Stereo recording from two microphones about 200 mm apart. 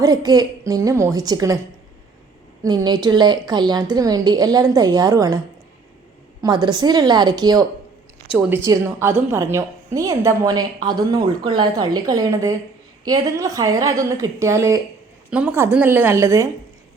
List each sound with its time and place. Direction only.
0.0 s a woman's voice: 20° right (ahead or behind)
2.6 s a woman's voice: 20° right (ahead or behind)
6.4 s a woman's voice: 20° right (ahead or behind)